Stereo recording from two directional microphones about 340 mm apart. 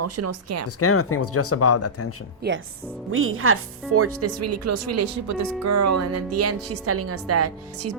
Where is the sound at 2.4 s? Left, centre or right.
Right.